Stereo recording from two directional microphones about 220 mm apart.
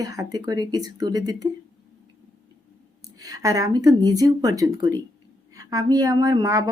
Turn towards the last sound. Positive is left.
turn(degrees=-15)  # may be behind; listen again after turning